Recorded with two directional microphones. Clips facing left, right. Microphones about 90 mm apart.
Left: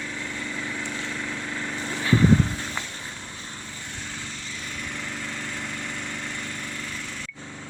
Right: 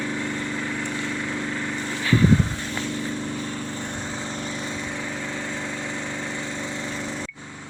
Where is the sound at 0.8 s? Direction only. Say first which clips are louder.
Right 4 dB; 10° right (ahead or behind).